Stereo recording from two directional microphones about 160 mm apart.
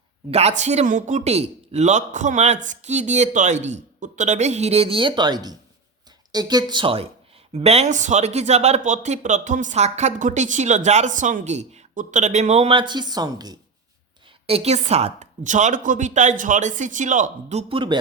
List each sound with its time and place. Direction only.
0.3 s speech: 40° right (ahead or behind); by 13.6 s 25° right (ahead or behind)
14.3 s speech: 40° right (ahead or behind)